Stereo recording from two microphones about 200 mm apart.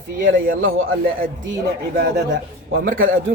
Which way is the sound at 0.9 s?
45° right (ahead or behind).